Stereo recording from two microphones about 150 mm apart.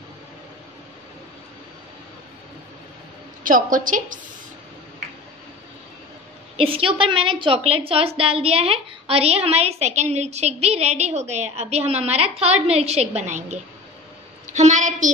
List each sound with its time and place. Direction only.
3.4 s a woman's voice: 65° right (ahead or behind)
6.5 s a woman's voice: 40° right (ahead or behind); by 15.0 s 55° right (ahead or behind)